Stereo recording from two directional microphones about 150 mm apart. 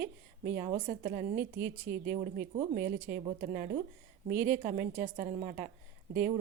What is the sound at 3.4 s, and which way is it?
Speech, 65° right (ahead or behind).